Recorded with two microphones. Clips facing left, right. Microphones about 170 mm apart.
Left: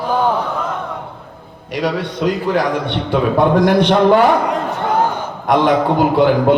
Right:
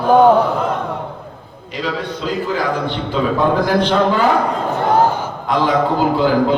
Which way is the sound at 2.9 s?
70° left (ahead or behind).